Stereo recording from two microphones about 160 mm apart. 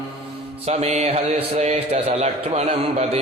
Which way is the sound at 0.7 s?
45° right (ahead or behind).